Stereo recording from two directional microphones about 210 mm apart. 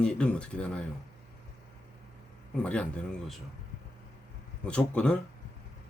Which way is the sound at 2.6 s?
5° left (ahead or behind).